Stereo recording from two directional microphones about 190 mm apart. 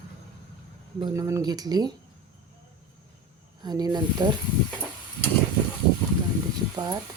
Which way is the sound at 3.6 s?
20° right (ahead or behind).